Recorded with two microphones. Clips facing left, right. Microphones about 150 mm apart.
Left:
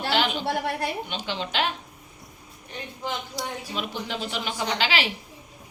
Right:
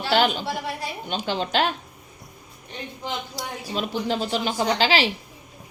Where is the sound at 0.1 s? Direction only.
45° right (ahead or behind).